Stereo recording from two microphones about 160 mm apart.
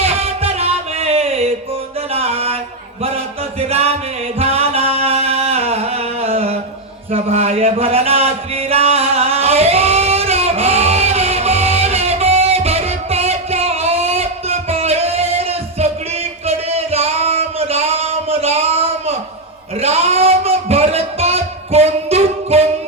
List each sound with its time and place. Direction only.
0.0 s music: 40° right (ahead or behind)
3.7 s music: 40° right (ahead or behind)
7.1 s a sound: 40° right (ahead or behind)